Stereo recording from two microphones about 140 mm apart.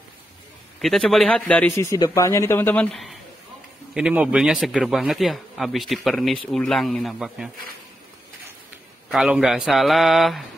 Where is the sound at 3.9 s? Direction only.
5° right (ahead or behind).